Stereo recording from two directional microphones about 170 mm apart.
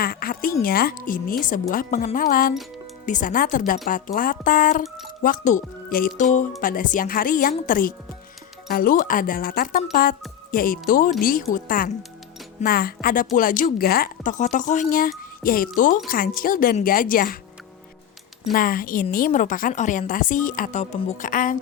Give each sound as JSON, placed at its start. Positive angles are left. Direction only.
{"t": 0.0, "sound": "a woman's voice", "side_deg": 60}
{"t": 18.5, "sound": "a woman's voice", "side_deg": 55}